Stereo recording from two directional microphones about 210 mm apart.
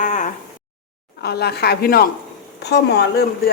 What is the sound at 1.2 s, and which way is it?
A man's voice, 50° left (ahead or behind).